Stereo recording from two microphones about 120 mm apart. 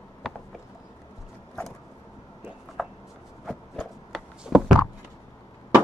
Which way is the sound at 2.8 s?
5° left (ahead or behind).